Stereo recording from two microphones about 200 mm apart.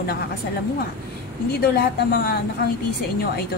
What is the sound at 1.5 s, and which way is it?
Speech, 50° left (ahead or behind).